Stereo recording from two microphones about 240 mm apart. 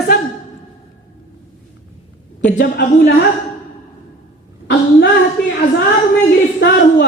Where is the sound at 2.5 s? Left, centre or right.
Left.